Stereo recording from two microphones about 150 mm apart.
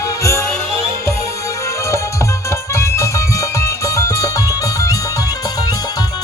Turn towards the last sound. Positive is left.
turn(degrees=25)  # may be behind; listen again after turning